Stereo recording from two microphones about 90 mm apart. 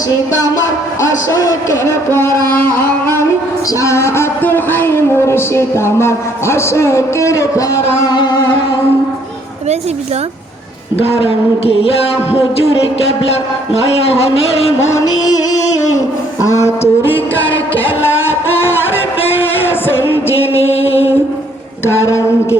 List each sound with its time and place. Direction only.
1.0 s a man's voice: 35° left (ahead or behind)
2.5 s carnatic music: 25° left (ahead or behind)
3.7 s speech: 35° left (ahead or behind)
8.1 s music: 50° left (ahead or behind)
11.1 s a sound: 90° left
14.8 s a man's voice: 35° left (ahead or behind)
16.4 s a sound: 35° left (ahead or behind)
17.4 s music: 20° left (ahead or behind)
20.2 s carnatic music: 25° left (ahead or behind)
21.8 s a man's voice: 30° left (ahead or behind)